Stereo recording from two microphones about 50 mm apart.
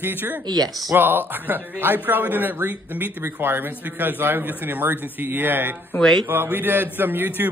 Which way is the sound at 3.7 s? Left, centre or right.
Right.